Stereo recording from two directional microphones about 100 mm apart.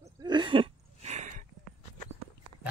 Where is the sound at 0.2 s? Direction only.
50° right (ahead or behind).